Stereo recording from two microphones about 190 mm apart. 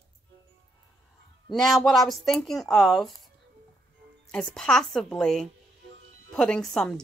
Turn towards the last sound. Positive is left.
turn(degrees=0)  # may be behind; listen again after turning